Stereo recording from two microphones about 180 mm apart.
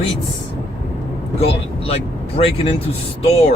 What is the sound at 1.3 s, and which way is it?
Speech, 35° left (ahead or behind).